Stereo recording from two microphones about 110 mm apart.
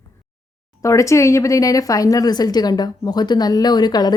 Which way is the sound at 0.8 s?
30° left (ahead or behind).